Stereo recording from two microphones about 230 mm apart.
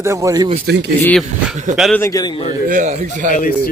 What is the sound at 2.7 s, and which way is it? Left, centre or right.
Speech, right.